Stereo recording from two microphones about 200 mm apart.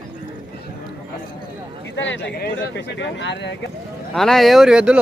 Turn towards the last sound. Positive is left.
turn(degrees=-5)  # may be behind; listen again after turning